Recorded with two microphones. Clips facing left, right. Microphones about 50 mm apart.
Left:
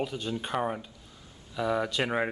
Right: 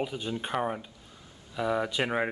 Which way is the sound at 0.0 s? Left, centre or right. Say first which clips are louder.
Even; centre.